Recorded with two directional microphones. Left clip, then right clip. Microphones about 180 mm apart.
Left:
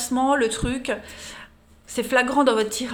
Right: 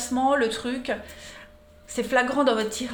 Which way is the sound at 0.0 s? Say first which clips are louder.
Left 2 dB; 35° left (ahead or behind).